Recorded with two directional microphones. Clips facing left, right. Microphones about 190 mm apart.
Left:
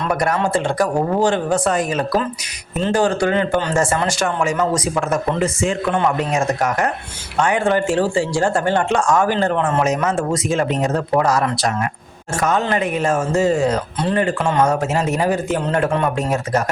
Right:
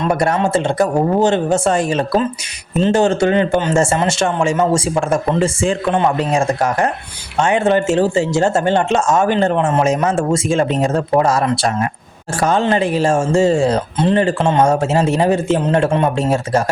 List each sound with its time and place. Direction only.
0.0 s speech: 25° right (ahead or behind)